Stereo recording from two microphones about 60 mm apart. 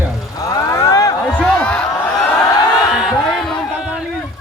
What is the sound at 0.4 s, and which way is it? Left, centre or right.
Vehicle, left.